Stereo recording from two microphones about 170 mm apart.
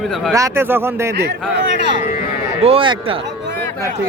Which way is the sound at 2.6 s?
35° right (ahead or behind).